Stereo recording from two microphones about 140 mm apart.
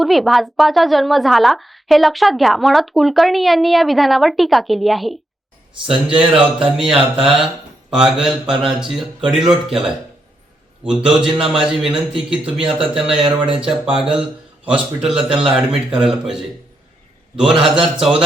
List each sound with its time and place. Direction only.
0.0 s a woman's voice: centre (ahead or behind)
11.0 s a woman's voice: 5° right (ahead or behind)
12.6 s a man's voice: 40° right (ahead or behind)
13.5 s a woman's voice: 5° right (ahead or behind)
17.6 s a woman's voice: 5° right (ahead or behind)